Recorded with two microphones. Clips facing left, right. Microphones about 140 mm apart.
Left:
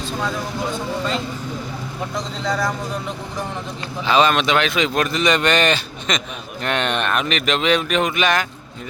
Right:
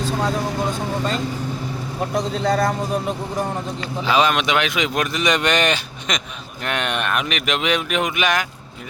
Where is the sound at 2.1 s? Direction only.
55° right (ahead or behind).